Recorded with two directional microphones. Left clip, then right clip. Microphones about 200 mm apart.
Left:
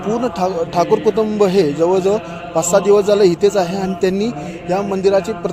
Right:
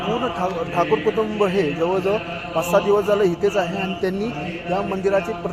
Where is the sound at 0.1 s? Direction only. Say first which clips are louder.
Left 6 dB; 55° left (ahead or behind).